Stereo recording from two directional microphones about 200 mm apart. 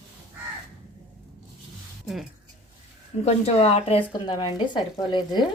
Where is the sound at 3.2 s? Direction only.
35° left (ahead or behind).